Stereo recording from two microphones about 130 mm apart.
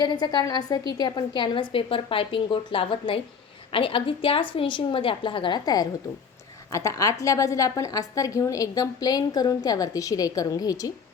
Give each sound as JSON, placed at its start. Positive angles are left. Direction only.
{"t": 0.0, "sound": "a woman's voice", "side_deg": 35}